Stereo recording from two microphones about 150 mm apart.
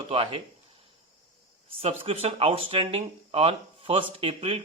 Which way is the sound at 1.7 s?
40° right (ahead or behind).